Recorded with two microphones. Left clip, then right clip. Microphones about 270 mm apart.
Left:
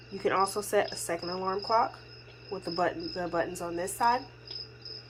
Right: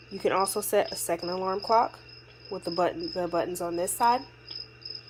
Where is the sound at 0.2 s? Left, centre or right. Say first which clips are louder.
Right 1 dB; centre.